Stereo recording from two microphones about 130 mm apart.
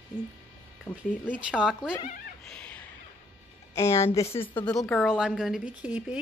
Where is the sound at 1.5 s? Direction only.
5° right (ahead or behind).